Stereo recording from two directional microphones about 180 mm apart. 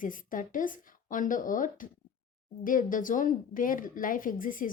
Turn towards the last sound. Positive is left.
turn(degrees=50)  # may be behind; listen again after turning